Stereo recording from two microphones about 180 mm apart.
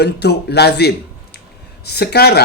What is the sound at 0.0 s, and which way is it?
A man's voice, 65° left (ahead or behind).